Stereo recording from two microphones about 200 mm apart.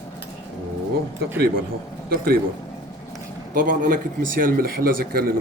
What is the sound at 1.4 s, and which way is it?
Speech, 50° right (ahead or behind).